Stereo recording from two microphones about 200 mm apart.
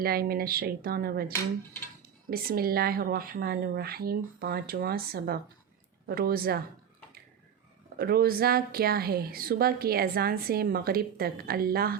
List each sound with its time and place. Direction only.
0.0 s a woman's voice: 50° right (ahead or behind)
7.9 s a woman's voice: 50° right (ahead or behind)